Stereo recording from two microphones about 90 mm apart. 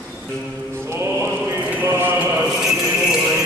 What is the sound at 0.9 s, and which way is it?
Mantra, 30° right (ahead or behind).